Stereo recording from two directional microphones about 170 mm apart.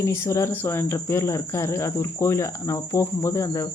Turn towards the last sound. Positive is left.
turn(degrees=20)  # may be behind; listen again after turning